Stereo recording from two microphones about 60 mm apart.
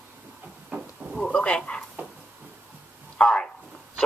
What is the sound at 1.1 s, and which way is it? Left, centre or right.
Speech, centre.